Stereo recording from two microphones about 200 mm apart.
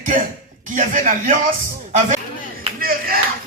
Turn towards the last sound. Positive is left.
turn(degrees=-50)  # may be behind; listen again after turning